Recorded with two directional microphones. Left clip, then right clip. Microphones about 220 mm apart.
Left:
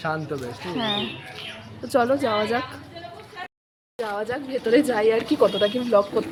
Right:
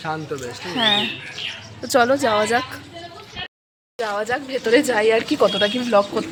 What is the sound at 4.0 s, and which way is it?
Speech, 5° right (ahead or behind).